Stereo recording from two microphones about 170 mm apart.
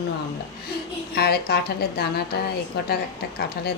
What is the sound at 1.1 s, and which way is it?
Speech, 70° left (ahead or behind).